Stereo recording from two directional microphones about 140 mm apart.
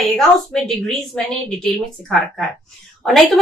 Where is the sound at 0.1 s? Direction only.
5° left (ahead or behind).